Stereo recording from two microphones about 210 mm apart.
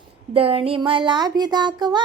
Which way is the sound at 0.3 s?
25° right (ahead or behind).